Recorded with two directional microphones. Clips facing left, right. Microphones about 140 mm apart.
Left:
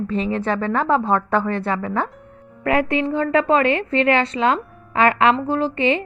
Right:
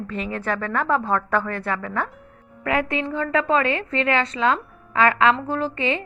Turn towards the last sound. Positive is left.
turn(degrees=30)  # may be behind; listen again after turning